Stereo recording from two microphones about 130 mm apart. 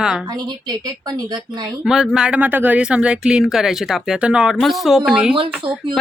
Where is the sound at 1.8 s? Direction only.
5° right (ahead or behind).